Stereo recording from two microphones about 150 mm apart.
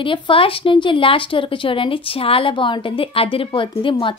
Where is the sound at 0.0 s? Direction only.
35° left (ahead or behind).